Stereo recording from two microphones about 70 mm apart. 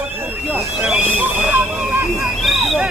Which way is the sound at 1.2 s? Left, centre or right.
Right.